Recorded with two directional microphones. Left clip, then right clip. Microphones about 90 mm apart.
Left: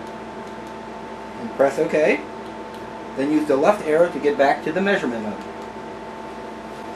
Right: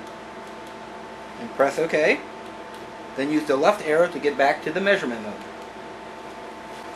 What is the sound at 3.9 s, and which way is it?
Speech, 15° right (ahead or behind).